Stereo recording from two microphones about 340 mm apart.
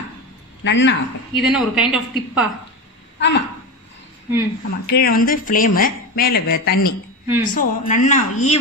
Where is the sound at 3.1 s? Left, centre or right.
Left.